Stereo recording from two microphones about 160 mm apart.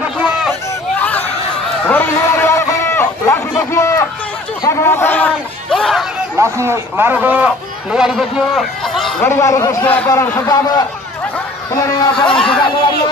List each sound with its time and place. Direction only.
0.5 s a sound: 10° left (ahead or behind)
4.6 s speech: 15° left (ahead or behind)
6.3 s a man's voice: 15° right (ahead or behind); by 9.1 s centre (ahead or behind)
9.2 s a man's voice: 15° left (ahead or behind)
12.3 s speech: 5° left (ahead or behind)